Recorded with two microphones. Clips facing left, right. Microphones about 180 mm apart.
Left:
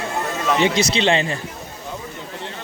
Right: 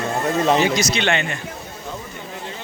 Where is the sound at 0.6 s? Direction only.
30° left (ahead or behind).